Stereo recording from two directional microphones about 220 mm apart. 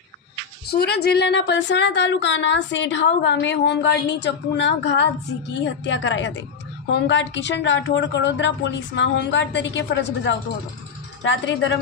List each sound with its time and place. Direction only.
0.7 s speech: 45° left (ahead or behind)